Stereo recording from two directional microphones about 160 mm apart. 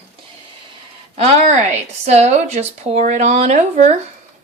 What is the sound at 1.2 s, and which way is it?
Speech, 45° right (ahead or behind).